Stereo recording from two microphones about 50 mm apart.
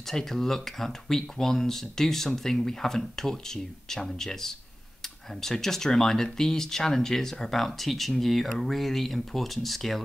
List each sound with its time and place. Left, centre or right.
0.0 s speech: centre